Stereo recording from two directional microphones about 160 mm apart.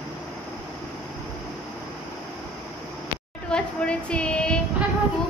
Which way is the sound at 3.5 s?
5° left (ahead or behind).